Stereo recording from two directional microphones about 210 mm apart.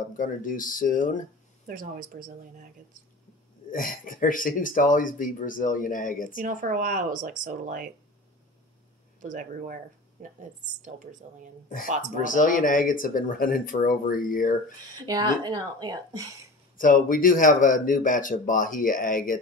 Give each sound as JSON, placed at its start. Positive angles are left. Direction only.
{"t": 0.2, "sound": "speech", "side_deg": 40}
{"t": 1.7, "sound": "speech", "side_deg": -40}
{"t": 3.7, "sound": "speech", "side_deg": 40}
{"t": 6.3, "sound": "speech", "side_deg": -40}
{"t": 9.2, "sound": "speech", "side_deg": -40}
{"t": 12.2, "sound": "speech", "side_deg": 40}
{"t": 15.0, "sound": "speech", "side_deg": -20}
{"t": 16.7, "sound": "speech", "side_deg": 40}